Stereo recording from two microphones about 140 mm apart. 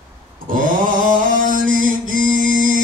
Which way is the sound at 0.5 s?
75° right (ahead or behind).